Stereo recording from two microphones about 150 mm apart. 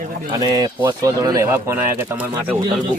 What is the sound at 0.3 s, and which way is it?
Speech, 25° right (ahead or behind).